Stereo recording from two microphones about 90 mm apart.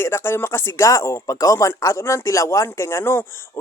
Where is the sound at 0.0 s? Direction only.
30° left (ahead or behind).